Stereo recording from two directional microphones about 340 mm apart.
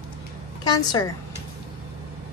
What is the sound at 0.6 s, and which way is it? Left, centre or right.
Speech, centre.